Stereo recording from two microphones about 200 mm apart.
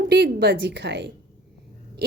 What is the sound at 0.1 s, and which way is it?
A woman's voice, 55° right (ahead or behind).